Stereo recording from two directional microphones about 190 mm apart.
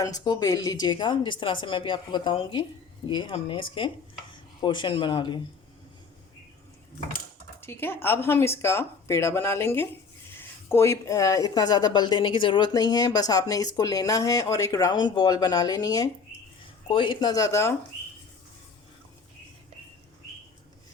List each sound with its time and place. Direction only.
0.0 s speech: 20° left (ahead or behind)
7.6 s speech: 10° left (ahead or behind)